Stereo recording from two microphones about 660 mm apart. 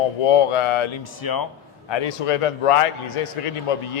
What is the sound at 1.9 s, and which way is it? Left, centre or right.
A man's voice, left.